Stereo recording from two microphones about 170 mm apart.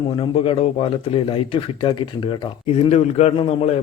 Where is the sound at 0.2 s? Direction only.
35° left (ahead or behind).